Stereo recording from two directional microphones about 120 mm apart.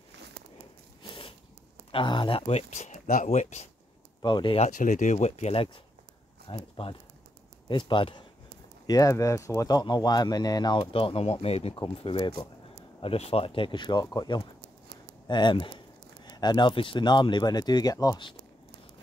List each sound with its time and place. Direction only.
1.0 s a sound: 50° left (ahead or behind)
1.9 s speech: 45° left (ahead or behind)
2.4 s speech: 65° left (ahead or behind)
4.2 s speech: 40° left (ahead or behind)
4.6 s speech: 90° left; by 5.7 s 60° left (ahead or behind)
6.4 s speech: 45° left (ahead or behind)
8.8 s speech: 30° left (ahead or behind); by 11.8 s 55° left (ahead or behind)
12.0 s speech: 45° left (ahead or behind)
13.0 s speech: 55° left (ahead or behind); by 18.2 s 30° left (ahead or behind)